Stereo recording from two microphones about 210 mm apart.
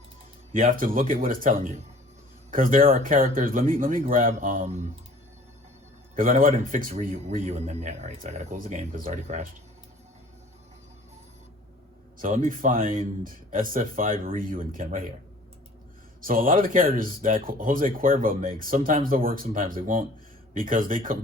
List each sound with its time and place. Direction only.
0.5 s speech: 40° right (ahead or behind)
6.1 s speech: 40° right (ahead or behind)
12.2 s speech: 40° right (ahead or behind)
16.2 s speech: 40° right (ahead or behind)